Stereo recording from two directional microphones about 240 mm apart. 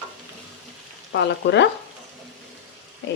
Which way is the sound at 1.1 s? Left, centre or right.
Left.